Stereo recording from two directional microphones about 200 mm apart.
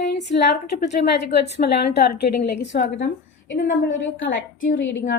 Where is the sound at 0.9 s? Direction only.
55° left (ahead or behind).